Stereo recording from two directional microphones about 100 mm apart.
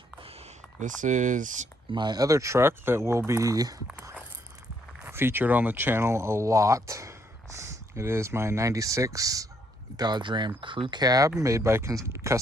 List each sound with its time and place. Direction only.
0.2 s a sound: 80° right
1.9 s speech: 45° right (ahead or behind)
5.1 s speech: 20° right (ahead or behind)
10.0 s speech: 50° right (ahead or behind)
11.0 s speech: 40° right (ahead or behind)